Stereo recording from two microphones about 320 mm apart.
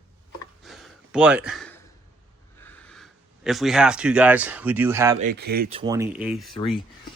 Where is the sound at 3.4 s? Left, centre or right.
Centre.